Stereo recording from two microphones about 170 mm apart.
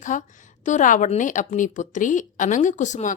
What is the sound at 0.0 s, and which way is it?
A woman's voice, 50° left (ahead or behind).